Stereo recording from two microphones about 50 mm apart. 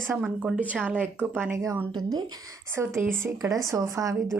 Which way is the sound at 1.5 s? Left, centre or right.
Right.